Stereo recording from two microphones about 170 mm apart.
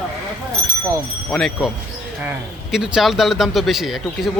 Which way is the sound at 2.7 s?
Centre (ahead or behind).